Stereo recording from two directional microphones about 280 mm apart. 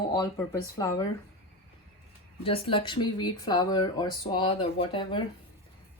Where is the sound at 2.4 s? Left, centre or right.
Centre.